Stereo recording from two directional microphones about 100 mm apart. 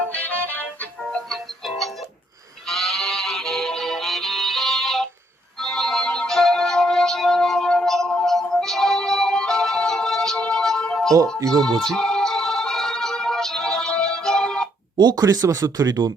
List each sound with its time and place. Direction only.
0.0 s music: 15° left (ahead or behind)
2.6 s music: centre (ahead or behind)
14.9 s speech: 45° right (ahead or behind)